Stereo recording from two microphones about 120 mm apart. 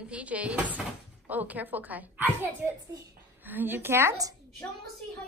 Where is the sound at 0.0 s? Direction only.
10° right (ahead or behind); by 4.4 s 25° right (ahead or behind).